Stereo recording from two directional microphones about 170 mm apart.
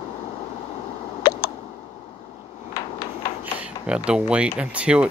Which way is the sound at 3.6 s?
5° right (ahead or behind).